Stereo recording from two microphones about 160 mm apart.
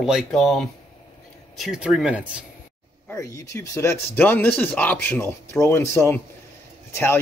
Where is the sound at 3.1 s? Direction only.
20° left (ahead or behind).